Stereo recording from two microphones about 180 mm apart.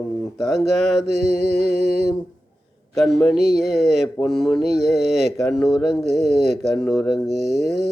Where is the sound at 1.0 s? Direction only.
65° left (ahead or behind).